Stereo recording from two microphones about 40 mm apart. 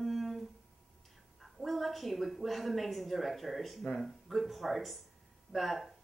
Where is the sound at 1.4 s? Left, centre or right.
Centre.